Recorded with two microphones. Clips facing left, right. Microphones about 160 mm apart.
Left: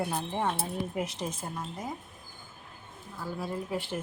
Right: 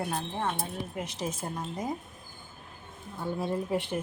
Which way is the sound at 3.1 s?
25° right (ahead or behind).